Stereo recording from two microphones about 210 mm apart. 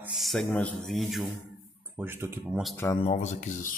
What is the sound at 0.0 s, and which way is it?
A man's voice, centre (ahead or behind).